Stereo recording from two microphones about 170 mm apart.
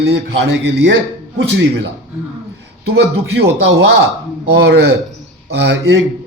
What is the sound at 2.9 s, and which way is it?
Speech, 75° right (ahead or behind).